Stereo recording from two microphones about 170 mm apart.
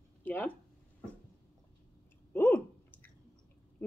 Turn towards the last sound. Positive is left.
turn(degrees=10)  # may be behind; listen again after turning